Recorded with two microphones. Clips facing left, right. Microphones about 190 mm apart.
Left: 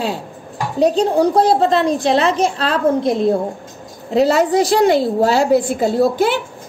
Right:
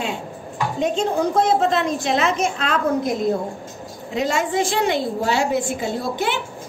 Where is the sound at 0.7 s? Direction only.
35° left (ahead or behind).